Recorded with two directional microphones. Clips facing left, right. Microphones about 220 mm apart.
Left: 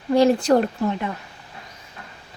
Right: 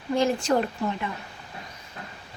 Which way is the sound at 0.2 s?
35° left (ahead or behind).